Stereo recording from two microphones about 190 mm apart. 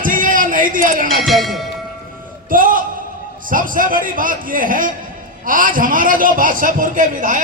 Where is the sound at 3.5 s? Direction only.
45° right (ahead or behind).